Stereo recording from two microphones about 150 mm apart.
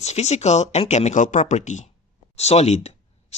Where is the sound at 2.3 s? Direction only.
45° left (ahead or behind).